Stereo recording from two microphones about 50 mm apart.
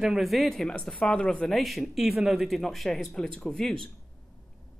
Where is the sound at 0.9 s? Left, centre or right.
Left.